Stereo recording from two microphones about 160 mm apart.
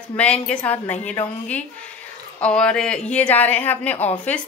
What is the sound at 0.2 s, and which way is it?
Speech, 10° left (ahead or behind).